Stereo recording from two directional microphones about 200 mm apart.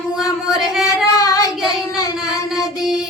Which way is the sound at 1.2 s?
20° left (ahead or behind).